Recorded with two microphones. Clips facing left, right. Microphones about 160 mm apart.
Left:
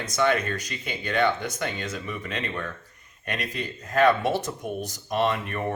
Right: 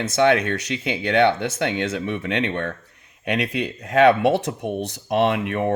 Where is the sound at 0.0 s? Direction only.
85° right.